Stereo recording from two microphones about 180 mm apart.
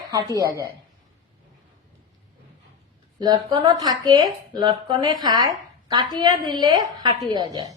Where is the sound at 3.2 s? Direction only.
25° right (ahead or behind).